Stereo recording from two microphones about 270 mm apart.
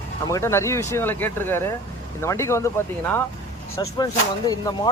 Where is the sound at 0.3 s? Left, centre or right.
Centre.